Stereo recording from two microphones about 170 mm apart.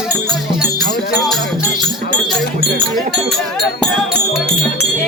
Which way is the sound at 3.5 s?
Centre (ahead or behind).